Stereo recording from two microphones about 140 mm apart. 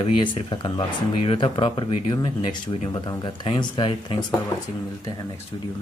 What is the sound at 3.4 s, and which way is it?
Speech, 35° left (ahead or behind).